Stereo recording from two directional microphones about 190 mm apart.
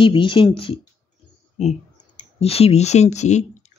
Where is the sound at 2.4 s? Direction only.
30° left (ahead or behind).